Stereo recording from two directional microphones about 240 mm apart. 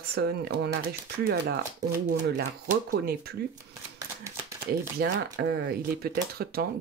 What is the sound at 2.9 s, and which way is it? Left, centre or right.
Speech, right.